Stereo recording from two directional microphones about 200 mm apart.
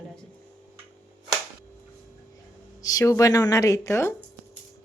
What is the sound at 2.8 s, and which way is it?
Speech, 15° left (ahead or behind).